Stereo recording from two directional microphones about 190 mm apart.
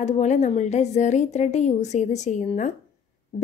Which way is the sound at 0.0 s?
35° left (ahead or behind).